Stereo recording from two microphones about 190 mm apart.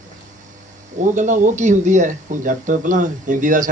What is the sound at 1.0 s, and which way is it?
Speech, 40° right (ahead or behind).